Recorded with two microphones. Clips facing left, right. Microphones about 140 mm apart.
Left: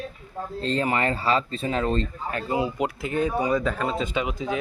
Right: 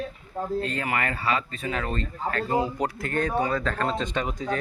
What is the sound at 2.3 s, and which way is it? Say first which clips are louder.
Speech: right 1 dB; 15° left (ahead or behind).